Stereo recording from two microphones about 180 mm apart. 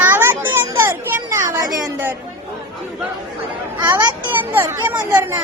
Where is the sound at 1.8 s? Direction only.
10° right (ahead or behind).